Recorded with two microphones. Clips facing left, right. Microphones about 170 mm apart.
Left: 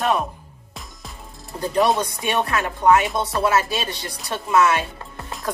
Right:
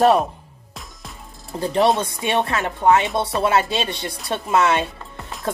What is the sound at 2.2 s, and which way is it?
Speech, 25° right (ahead or behind).